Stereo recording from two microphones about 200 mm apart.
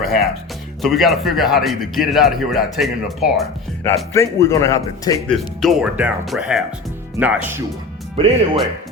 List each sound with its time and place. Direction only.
0.0 s a man's voice: centre (ahead or behind)
3.8 s a man's voice: 15° left (ahead or behind)
5.3 s a man's voice: centre (ahead or behind)
8.2 s speech: 30° right (ahead or behind)